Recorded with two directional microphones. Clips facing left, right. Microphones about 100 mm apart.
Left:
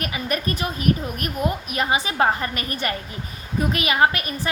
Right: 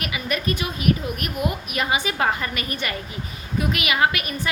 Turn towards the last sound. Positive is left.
turn(degrees=35)  # may be behind; listen again after turning